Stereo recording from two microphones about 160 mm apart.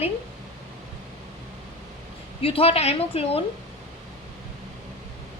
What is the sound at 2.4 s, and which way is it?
A woman's voice, 35° left (ahead or behind).